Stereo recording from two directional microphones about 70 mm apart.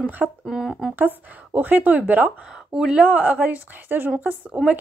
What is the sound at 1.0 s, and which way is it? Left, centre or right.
Speech, right.